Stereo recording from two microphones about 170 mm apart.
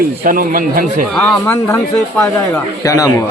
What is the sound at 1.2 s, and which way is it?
Speech, centre (ahead or behind).